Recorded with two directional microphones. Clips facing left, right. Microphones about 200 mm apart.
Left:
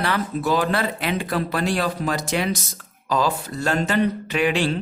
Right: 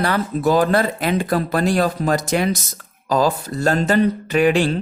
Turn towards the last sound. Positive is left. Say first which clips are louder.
# right 5 dB
turn(degrees=-45)  # may be behind; listen again after turning